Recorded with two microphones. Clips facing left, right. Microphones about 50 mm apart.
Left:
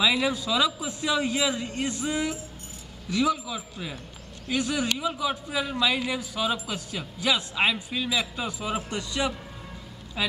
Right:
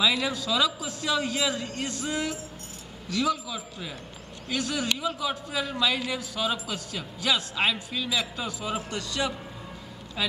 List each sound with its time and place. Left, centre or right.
0.0 s a man's voice: centre